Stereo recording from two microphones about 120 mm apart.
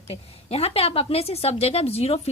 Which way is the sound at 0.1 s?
60° left (ahead or behind).